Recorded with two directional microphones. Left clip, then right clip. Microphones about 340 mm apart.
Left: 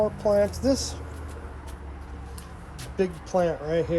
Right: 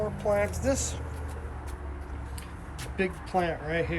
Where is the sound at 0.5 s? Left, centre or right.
Centre.